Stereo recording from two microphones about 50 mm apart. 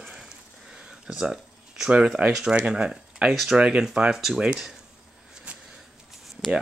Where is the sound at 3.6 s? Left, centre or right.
Centre.